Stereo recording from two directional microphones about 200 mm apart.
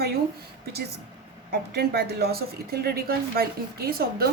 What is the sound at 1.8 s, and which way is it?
A woman's voice, 50° right (ahead or behind).